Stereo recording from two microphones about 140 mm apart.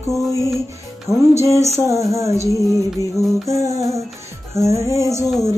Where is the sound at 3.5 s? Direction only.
20° right (ahead or behind).